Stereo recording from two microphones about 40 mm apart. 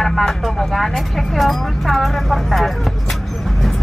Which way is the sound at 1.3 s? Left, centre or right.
Centre.